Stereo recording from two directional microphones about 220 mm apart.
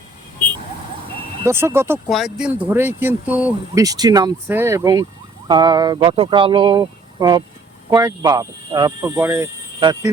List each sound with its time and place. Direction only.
1.5 s speech: 10° right (ahead or behind)